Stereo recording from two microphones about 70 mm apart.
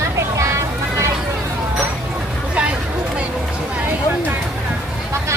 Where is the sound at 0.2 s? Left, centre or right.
Right.